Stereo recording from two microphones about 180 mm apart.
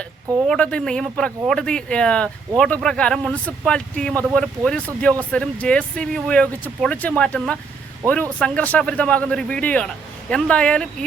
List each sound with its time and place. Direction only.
0.4 s speech: 5° left (ahead or behind)
8.0 s speech: 15° right (ahead or behind)
8.4 s a man's voice: 5° left (ahead or behind)